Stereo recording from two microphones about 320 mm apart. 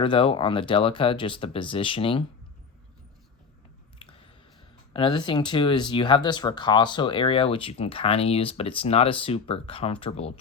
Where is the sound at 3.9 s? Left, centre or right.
Centre.